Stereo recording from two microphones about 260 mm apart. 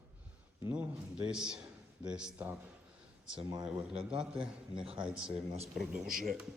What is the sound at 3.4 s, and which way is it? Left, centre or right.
Speech, centre.